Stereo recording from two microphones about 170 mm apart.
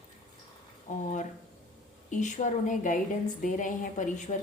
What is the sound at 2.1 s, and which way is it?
Speech, 45° left (ahead or behind).